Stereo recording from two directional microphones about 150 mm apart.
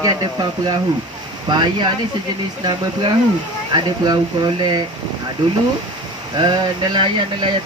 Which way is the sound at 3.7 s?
30° right (ahead or behind).